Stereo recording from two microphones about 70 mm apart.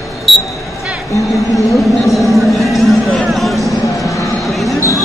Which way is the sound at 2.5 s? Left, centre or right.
Centre.